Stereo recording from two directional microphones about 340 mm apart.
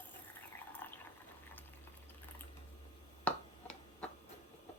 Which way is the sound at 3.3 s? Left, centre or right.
Centre.